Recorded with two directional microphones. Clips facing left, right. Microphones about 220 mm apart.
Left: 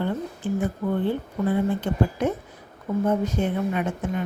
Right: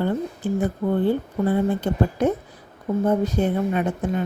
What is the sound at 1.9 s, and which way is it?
Speech, 40° right (ahead or behind).